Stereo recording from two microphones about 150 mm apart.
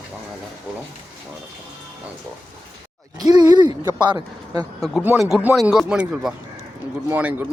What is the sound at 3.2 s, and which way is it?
Speech, 25° right (ahead or behind).